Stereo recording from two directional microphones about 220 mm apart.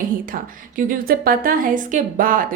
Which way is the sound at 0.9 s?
40° right (ahead or behind).